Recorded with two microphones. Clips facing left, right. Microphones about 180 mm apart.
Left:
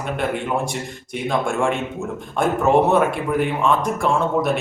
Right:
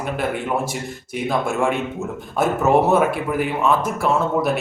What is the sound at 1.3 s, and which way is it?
Speech, 5° right (ahead or behind).